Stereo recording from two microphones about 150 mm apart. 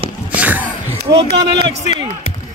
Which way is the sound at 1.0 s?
35° right (ahead or behind).